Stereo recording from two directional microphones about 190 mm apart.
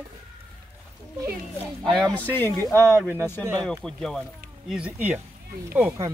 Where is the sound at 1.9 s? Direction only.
5° left (ahead or behind).